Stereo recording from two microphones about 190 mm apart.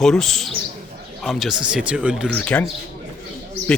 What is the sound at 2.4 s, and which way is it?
Speech, 10° left (ahead or behind).